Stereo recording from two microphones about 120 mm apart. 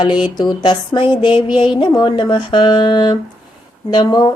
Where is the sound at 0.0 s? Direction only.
40° left (ahead or behind).